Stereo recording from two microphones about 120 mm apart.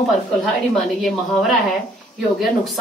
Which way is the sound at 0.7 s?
Centre (ahead or behind).